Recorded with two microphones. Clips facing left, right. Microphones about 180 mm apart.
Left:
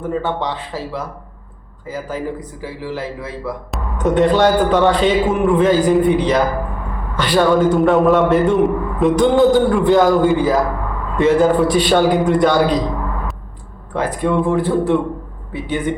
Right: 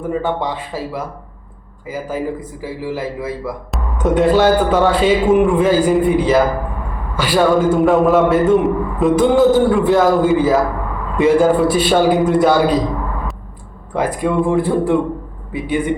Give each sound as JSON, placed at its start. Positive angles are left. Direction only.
{"t": 0.0, "sound": "a man's voice", "side_deg": -10}
{"t": 13.9, "sound": "a man's voice", "side_deg": -10}